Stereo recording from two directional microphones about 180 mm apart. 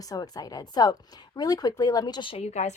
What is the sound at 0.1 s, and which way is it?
A woman's voice, 20° left (ahead or behind).